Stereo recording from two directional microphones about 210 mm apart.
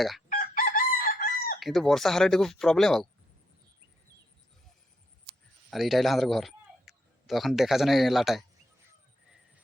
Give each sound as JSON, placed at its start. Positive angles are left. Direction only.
{"t": 0.3, "sound": "chicken", "side_deg": 40}
{"t": 1.5, "sound": "speech", "side_deg": 0}
{"t": 5.7, "sound": "speech", "side_deg": 0}